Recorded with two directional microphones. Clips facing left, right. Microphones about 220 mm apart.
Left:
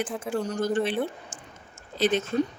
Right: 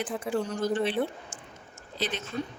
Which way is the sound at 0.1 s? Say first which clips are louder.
Even; centre (ahead or behind).